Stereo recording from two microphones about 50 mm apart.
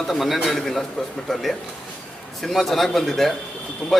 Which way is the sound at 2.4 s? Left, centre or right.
Centre.